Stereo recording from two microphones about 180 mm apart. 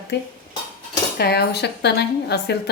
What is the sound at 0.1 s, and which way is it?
A woman's voice, 70° left (ahead or behind).